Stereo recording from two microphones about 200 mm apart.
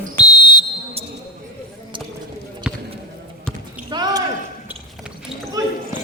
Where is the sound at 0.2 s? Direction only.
20° left (ahead or behind).